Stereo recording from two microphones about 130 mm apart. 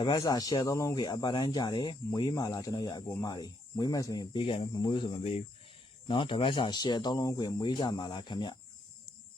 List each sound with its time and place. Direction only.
0.0 s speech: 30° left (ahead or behind)
4.4 s speech: 40° left (ahead or behind)